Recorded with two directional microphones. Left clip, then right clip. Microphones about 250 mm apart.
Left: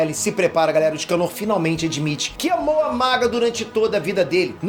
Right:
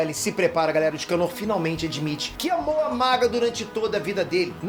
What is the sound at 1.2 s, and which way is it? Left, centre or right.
Speech, centre.